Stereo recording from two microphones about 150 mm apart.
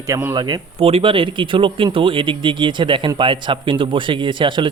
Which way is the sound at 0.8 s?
40° right (ahead or behind).